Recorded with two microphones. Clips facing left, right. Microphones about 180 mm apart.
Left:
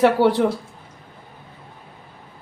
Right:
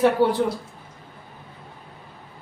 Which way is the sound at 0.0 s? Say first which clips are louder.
Left 3 dB; 75° left (ahead or behind).